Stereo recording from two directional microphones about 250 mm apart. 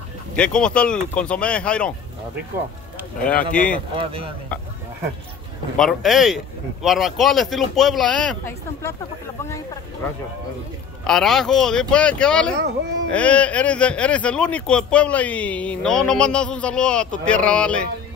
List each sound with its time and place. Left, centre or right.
0.4 s speech: centre
3.3 s speech: centre
3.9 s speech: right
5.8 s speech: centre
11.1 s speech: centre